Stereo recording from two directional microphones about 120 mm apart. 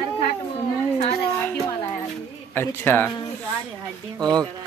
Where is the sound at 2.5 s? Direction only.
15° left (ahead or behind).